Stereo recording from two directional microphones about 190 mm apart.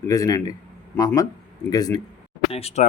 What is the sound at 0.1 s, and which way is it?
Speech, 15° left (ahead or behind).